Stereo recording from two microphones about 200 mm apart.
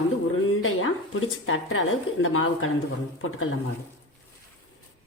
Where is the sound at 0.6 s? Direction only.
80° left.